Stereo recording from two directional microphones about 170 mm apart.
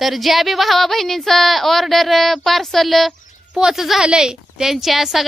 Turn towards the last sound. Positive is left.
turn(degrees=0)  # may be behind; listen again after turning